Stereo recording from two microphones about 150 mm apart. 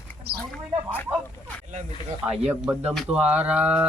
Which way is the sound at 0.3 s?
90° right.